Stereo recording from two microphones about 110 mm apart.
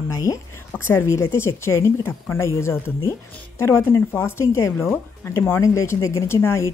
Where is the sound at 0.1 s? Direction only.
30° left (ahead or behind).